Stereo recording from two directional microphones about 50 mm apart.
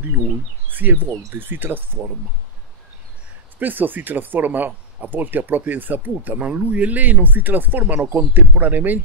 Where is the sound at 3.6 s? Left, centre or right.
Right.